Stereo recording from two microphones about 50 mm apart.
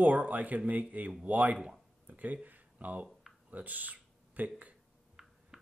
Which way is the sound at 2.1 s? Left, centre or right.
Right.